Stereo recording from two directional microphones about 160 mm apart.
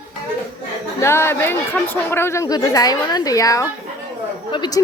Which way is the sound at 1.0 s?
15° left (ahead or behind).